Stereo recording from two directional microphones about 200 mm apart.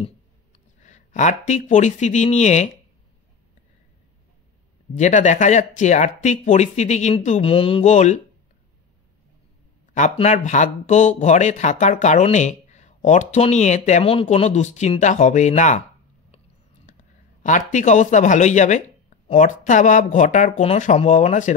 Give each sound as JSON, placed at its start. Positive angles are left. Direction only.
{"t": 0.8, "sound": "speech", "side_deg": 35}
{"t": 4.9, "sound": "speech", "side_deg": 35}
{"t": 9.9, "sound": "speech", "side_deg": 35}
{"t": 17.4, "sound": "speech", "side_deg": 40}